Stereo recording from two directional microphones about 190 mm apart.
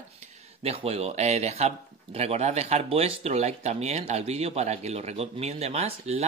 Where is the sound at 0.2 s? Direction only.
30° right (ahead or behind).